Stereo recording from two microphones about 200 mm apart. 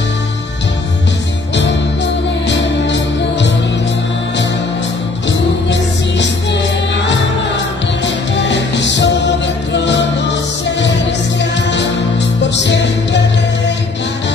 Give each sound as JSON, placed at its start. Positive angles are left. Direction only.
{"t": 1.5, "sound": "music", "side_deg": 60}
{"t": 5.7, "sound": "music", "side_deg": 60}
{"t": 11.7, "sound": "music", "side_deg": 60}